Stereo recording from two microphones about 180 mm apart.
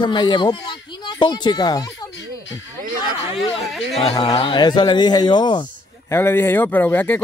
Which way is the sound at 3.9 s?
30° left (ahead or behind).